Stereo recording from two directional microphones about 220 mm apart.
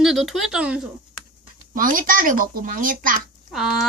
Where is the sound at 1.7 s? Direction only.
40° right (ahead or behind).